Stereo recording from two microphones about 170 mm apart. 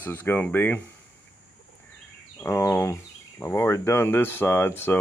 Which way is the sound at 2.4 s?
15° left (ahead or behind).